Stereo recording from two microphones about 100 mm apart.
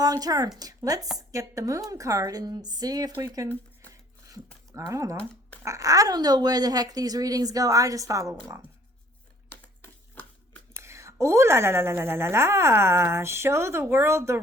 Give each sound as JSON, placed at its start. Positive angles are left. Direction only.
{"t": 0.0, "sound": "speech", "side_deg": -40}
{"t": 4.7, "sound": "speech", "side_deg": -30}
{"t": 9.5, "sound": "a sound", "side_deg": 25}
{"t": 10.8, "sound": "a woman's voice", "side_deg": -30}